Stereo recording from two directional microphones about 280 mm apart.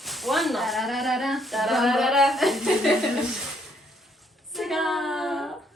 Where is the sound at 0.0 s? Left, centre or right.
Centre.